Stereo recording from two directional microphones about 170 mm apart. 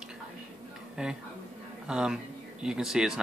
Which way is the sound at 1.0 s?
5° right (ahead or behind).